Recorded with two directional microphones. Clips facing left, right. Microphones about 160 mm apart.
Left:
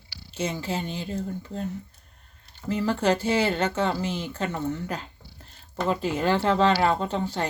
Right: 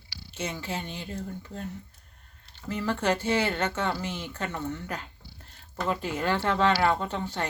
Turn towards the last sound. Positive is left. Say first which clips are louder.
# left 4 dB
turn(degrees=35)  # may be behind; listen again after turning